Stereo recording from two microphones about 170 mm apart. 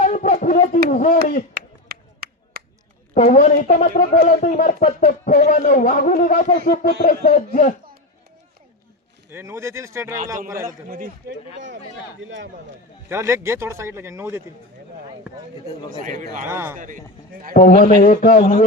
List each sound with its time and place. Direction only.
0.0 s a sound: 50° left (ahead or behind)
1.5 s a sound: 65° right (ahead or behind)
3.2 s speech: 50° left (ahead or behind)
9.3 s a man's voice: 15° right (ahead or behind)
10.8 s a man's voice: 55° right (ahead or behind)
13.1 s a man's voice: 15° right (ahead or behind)
15.9 s a man's voice: 45° right (ahead or behind)
16.5 s a man's voice: 15° right (ahead or behind)
16.7 s a man's voice: 50° right (ahead or behind)
17.5 s speech: 60° left (ahead or behind)